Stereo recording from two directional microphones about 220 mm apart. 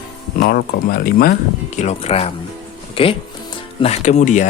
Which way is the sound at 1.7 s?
30° left (ahead or behind).